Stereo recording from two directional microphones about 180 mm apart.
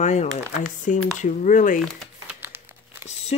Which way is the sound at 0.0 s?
40° left (ahead or behind).